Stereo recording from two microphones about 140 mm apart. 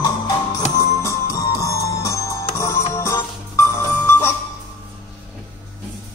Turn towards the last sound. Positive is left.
turn(degrees=15)  # may be behind; listen again after turning